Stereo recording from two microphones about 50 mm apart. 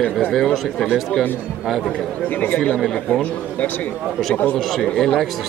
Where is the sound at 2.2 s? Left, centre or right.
Left.